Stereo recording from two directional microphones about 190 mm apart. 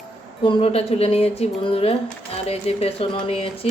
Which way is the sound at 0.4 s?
30° left (ahead or behind).